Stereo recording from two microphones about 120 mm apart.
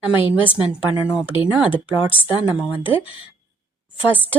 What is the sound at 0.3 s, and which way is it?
Speech, 15° right (ahead or behind).